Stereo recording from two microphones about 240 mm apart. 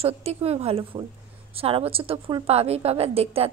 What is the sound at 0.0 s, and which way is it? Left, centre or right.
A woman's voice, right.